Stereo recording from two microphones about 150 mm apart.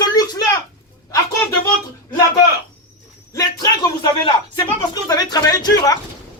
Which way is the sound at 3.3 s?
25° left (ahead or behind).